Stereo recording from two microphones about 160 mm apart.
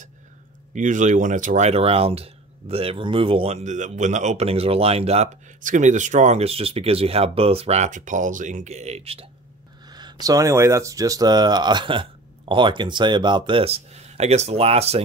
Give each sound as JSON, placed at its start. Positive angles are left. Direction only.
{"t": 0.7, "sound": "speech", "side_deg": -50}
{"t": 9.8, "sound": "speech", "side_deg": -25}